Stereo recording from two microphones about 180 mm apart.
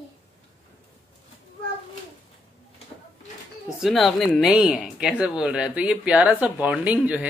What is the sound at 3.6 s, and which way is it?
Speech, centre (ahead or behind).